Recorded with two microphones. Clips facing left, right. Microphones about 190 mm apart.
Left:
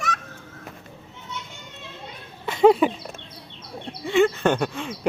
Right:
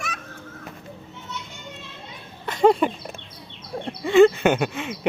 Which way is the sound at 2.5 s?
5° left (ahead or behind).